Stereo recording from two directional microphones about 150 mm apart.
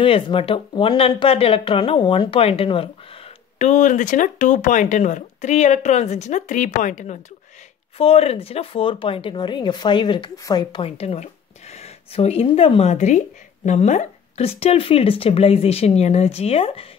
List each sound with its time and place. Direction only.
0.0 s speech: 35° left (ahead or behind)
3.5 s speech: 55° left (ahead or behind)
8.0 s speech: 40° left (ahead or behind)
11.0 s speech: 45° left (ahead or behind)
12.9 s speech: 55° left (ahead or behind)